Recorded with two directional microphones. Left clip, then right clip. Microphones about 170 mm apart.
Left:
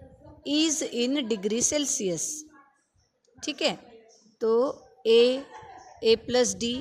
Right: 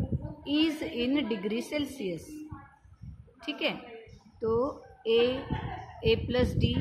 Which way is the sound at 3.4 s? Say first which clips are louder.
Left 4 dB; 50° left (ahead or behind).